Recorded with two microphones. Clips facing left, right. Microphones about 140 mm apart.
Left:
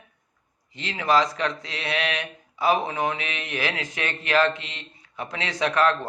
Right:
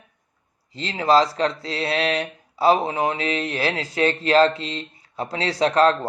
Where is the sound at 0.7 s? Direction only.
35° right (ahead or behind).